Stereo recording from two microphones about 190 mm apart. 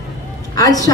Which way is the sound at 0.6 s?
20° left (ahead or behind).